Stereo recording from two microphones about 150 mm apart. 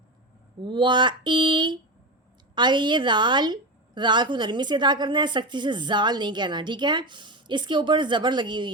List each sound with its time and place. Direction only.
0.6 s a woman's voice: 30° right (ahead or behind)